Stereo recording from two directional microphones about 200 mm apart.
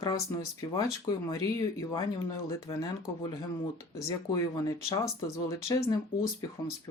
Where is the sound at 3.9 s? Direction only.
15° left (ahead or behind).